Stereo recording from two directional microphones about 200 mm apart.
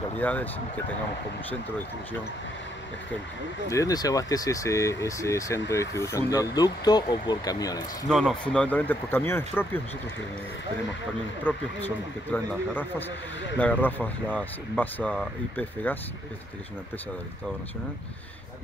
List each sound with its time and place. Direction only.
0.2 s speech: 10° left (ahead or behind)
3.7 s speech: 20° left (ahead or behind)
8.1 s speech: centre (ahead or behind)
11.5 s speech: 10° left (ahead or behind)
13.6 s speech: 10° left (ahead or behind)